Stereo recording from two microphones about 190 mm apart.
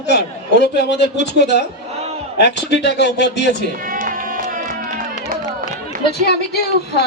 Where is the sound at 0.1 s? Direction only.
60° left (ahead or behind).